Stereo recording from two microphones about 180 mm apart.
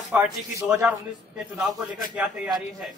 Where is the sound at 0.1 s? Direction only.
10° right (ahead or behind).